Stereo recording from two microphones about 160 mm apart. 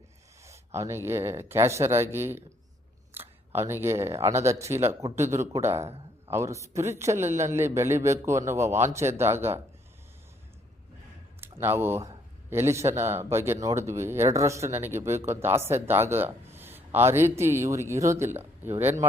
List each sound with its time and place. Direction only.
0.4 s a man's voice: 20° right (ahead or behind)
11.3 s a man's voice: 15° right (ahead or behind)